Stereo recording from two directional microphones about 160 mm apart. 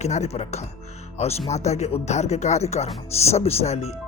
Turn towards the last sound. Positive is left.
turn(degrees=40)  # may be behind; listen again after turning